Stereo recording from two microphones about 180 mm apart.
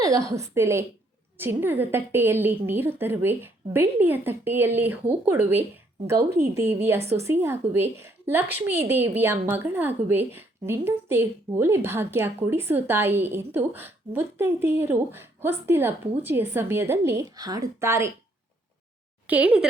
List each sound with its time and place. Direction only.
0.0 s a woman's voice: 15° right (ahead or behind)
19.3 s a woman's voice: 5° right (ahead or behind)